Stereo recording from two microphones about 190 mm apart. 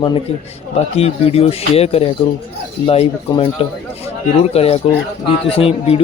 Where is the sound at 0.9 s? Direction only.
30° left (ahead or behind).